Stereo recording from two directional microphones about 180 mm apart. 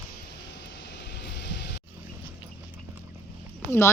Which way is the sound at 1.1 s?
70° left (ahead or behind).